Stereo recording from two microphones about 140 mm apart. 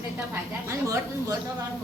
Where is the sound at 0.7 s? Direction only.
20° right (ahead or behind).